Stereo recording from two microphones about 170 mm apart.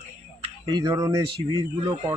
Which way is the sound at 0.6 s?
25° right (ahead or behind).